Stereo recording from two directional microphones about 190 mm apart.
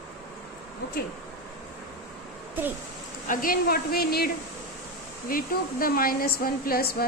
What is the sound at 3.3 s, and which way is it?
Speech, 50° left (ahead or behind).